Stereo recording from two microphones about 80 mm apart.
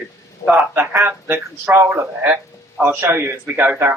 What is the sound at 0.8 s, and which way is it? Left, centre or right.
A man's voice, right.